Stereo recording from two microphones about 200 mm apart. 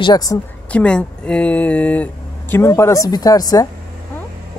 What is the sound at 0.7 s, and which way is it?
Speech, 5° left (ahead or behind).